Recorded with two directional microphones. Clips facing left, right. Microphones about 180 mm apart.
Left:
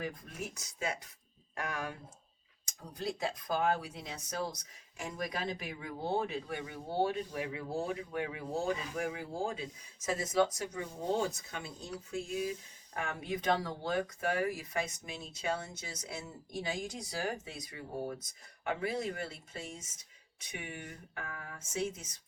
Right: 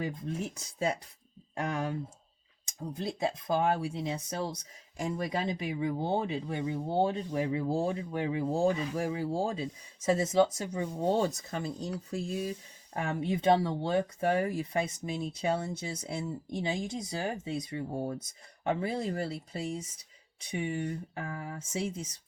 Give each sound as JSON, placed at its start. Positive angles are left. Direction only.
{"t": 0.0, "sound": "speech", "side_deg": -25}